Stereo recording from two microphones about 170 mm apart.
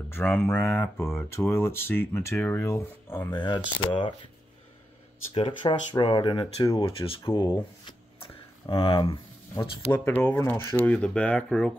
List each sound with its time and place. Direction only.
0.1 s speech: 10° left (ahead or behind); by 4.1 s 25° left (ahead or behind)
5.3 s speech: 30° left (ahead or behind)
9.6 s speech: 10° left (ahead or behind)